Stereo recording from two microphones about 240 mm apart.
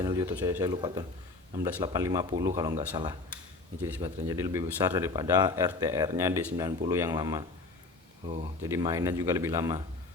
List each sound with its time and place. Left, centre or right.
0.0 s speech: centre
8.6 s speech: centre